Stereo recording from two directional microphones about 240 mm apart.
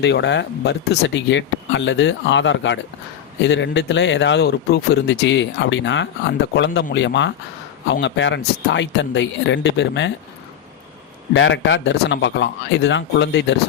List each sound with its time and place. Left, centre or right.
0.0 s speech: left
11.3 s speech: left